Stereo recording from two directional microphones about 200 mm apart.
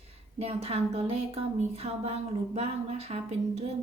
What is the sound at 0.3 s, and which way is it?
A woman's voice, 30° right (ahead or behind).